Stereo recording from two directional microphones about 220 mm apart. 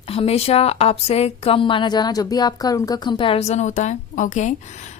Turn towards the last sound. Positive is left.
turn(degrees=35)  # may be behind; listen again after turning